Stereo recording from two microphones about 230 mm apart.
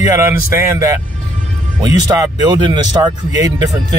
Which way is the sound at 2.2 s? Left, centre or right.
Centre.